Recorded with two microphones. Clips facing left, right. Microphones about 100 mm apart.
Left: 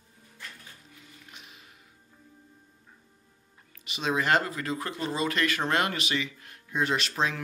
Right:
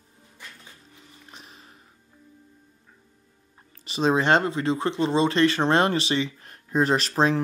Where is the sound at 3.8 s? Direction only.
35° right (ahead or behind).